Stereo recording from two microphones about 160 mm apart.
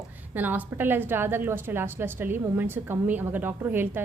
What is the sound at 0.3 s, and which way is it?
A woman's voice, 10° right (ahead or behind).